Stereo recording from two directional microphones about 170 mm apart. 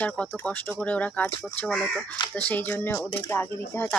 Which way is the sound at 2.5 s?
10° left (ahead or behind).